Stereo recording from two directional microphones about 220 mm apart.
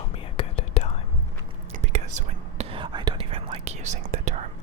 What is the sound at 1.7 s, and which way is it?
Whispering, 30° right (ahead or behind).